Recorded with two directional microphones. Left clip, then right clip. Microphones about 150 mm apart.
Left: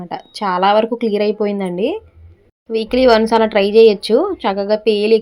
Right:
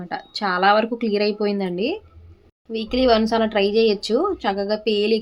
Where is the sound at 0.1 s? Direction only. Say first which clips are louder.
Left 4 dB; 25° left (ahead or behind).